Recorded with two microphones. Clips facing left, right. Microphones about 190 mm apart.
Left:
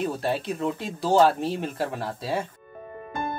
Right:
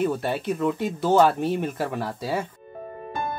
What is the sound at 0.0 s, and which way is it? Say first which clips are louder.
Speech: right 2 dB; centre (ahead or behind).